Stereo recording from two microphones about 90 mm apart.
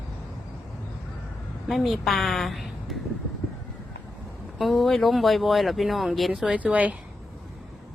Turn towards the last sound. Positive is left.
turn(degrees=-15)  # may be behind; listen again after turning